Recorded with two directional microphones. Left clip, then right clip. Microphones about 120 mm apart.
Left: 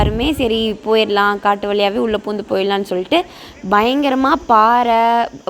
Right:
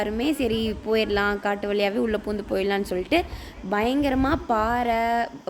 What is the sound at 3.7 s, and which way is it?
A woman's voice, 35° left (ahead or behind).